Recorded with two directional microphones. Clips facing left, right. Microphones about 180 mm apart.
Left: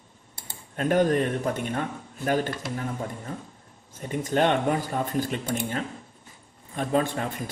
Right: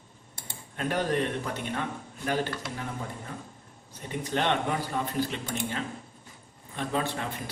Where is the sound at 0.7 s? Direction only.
45° left (ahead or behind).